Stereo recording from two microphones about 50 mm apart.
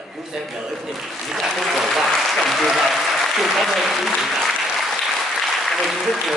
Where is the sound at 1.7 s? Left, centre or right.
Centre.